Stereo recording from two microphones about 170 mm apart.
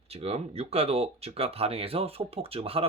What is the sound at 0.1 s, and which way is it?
Speech, 35° right (ahead or behind).